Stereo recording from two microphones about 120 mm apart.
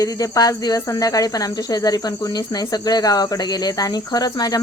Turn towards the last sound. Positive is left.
turn(degrees=30)  # may be behind; listen again after turning